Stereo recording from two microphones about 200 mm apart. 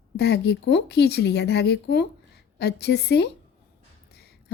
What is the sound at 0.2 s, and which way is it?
A woman's voice, 55° left (ahead or behind).